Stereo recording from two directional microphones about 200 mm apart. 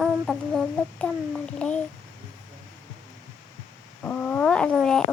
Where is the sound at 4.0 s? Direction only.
10° left (ahead or behind).